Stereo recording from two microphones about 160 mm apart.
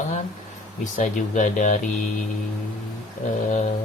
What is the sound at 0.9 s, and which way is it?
Speech, 55° left (ahead or behind).